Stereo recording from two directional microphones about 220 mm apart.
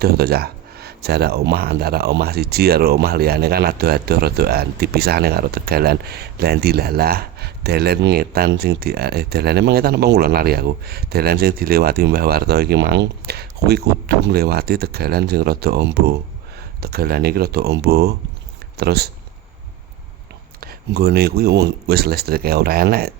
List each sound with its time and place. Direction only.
0.0 s speech: 45° right (ahead or behind)
20.6 s speech: 45° right (ahead or behind)